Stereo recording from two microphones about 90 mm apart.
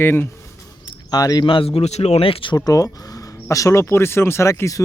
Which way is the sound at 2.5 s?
40° left (ahead or behind).